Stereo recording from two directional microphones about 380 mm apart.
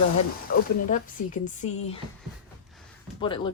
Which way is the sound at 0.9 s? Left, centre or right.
Centre.